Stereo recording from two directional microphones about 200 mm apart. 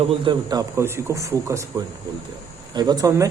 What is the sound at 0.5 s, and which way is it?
Speech, 15° right (ahead or behind).